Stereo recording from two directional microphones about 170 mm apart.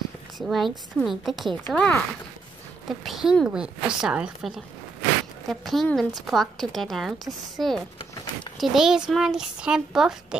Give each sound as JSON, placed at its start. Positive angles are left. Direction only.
{"t": 0.4, "sound": "speech", "side_deg": 0}
{"t": 3.1, "sound": "speech", "side_deg": 0}